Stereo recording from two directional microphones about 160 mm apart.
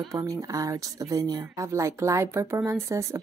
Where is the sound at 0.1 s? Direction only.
20° right (ahead or behind).